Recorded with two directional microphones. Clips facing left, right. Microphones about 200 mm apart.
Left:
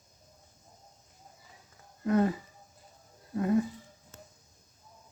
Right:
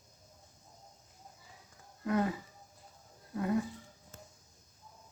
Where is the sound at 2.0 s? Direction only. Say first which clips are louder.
Left 5 dB; 35° left (ahead or behind).